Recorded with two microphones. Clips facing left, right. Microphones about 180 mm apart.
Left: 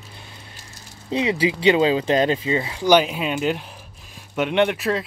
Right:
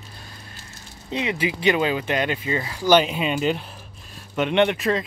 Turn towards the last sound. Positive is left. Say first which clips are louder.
# even
turn(degrees=5)  # may be behind; listen again after turning